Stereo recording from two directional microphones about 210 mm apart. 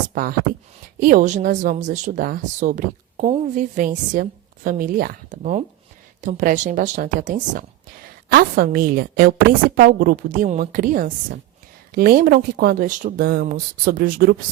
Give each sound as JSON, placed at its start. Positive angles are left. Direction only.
{"t": 0.1, "sound": "a woman's voice", "side_deg": -45}